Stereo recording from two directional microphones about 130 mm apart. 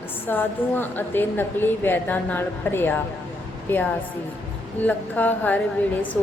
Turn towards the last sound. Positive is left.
turn(degrees=10)  # may be behind; listen again after turning